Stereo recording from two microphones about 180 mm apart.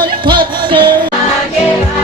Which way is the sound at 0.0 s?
25° right (ahead or behind).